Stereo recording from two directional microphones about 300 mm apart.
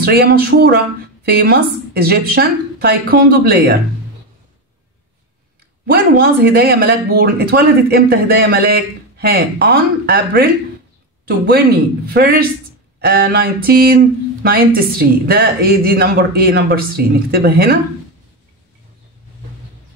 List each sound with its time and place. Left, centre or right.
0.0 s speech: right
5.9 s speech: right